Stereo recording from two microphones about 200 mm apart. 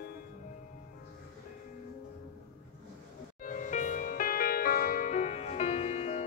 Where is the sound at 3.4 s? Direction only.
40° left (ahead or behind).